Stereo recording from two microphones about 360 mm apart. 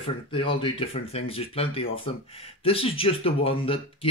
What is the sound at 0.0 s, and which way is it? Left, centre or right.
Speech, centre.